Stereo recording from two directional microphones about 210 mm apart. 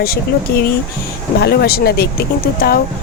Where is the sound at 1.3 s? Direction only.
50° left (ahead or behind).